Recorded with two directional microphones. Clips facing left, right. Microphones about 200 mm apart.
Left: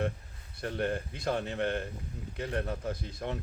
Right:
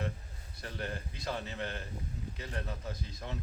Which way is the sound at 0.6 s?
55° left (ahead or behind).